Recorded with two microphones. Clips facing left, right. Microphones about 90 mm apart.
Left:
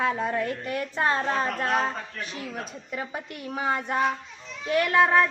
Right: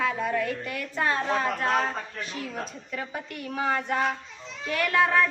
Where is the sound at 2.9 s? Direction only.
25° left (ahead or behind).